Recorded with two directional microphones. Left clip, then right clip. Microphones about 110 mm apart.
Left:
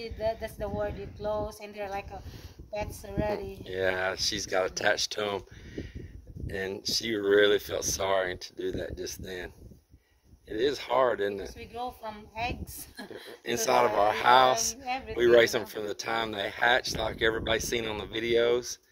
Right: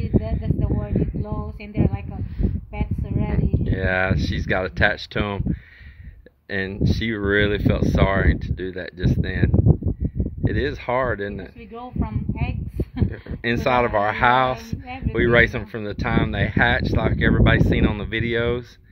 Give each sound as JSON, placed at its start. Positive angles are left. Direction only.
{"t": 0.0, "sound": "speech", "side_deg": 25}
{"t": 2.8, "sound": "speech", "side_deg": 25}
{"t": 6.6, "sound": "speech", "side_deg": 30}
{"t": 10.6, "sound": "speech", "side_deg": 25}